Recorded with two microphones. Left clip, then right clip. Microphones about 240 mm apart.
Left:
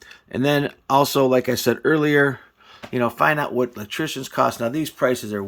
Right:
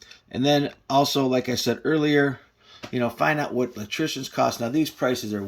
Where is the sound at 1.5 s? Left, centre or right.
Centre.